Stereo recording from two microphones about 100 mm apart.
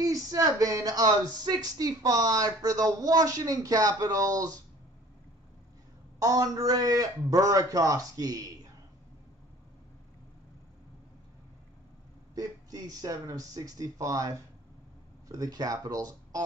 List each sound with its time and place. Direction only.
0.0 s speech: 35° right (ahead or behind)
6.1 s speech: 40° right (ahead or behind)
12.4 s speech: 35° right (ahead or behind)